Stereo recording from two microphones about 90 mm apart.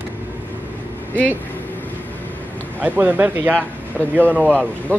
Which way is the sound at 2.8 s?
20° right (ahead or behind).